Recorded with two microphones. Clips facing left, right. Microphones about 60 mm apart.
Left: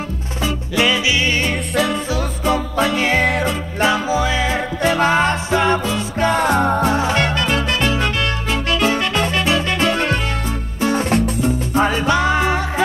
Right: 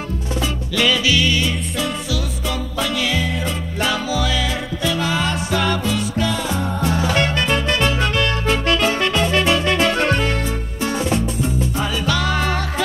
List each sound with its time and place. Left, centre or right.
0.7 s music: left
3.3 s music: left
3.8 s music: left
7.0 s music: left
11.0 s music: left
12.1 s music: left